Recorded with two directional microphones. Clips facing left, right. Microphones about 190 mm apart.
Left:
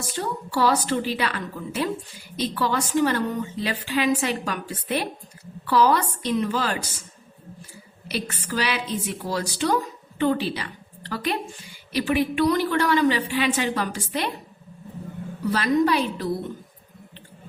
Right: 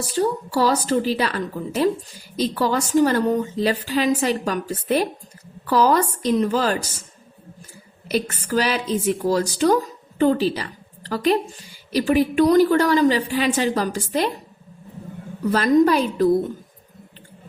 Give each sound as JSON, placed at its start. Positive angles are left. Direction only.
{"t": 0.1, "sound": "a woman's voice", "side_deg": -40}
{"t": 8.0, "sound": "a woman's voice", "side_deg": -45}
{"t": 15.4, "sound": "a woman's voice", "side_deg": -45}